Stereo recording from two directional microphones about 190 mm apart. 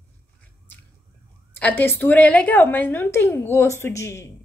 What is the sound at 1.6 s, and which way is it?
A woman's voice, 10° left (ahead or behind).